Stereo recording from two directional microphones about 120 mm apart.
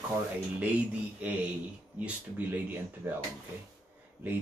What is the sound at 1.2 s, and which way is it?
Speech, 10° right (ahead or behind).